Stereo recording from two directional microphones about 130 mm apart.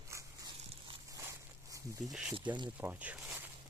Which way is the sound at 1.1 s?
25° right (ahead or behind).